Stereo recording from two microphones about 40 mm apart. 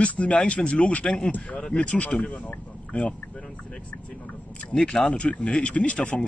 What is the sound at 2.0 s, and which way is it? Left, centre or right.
A man's voice, left.